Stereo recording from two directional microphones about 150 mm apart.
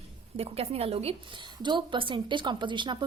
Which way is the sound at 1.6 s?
30° right (ahead or behind).